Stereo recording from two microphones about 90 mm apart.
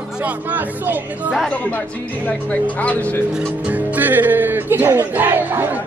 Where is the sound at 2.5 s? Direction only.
15° left (ahead or behind).